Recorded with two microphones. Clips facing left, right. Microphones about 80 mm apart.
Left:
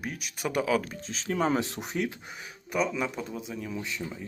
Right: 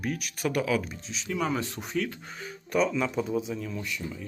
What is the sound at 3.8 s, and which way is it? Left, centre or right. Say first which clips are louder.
Speech: even; left.